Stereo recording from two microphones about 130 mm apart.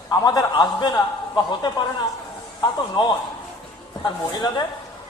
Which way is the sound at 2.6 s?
35° left (ahead or behind).